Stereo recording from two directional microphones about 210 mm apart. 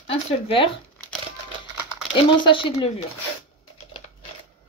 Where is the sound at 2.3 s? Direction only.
25° left (ahead or behind).